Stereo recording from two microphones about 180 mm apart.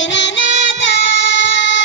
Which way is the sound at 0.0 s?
90° left.